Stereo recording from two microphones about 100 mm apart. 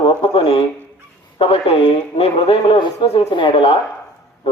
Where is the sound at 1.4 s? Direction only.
75° left (ahead or behind).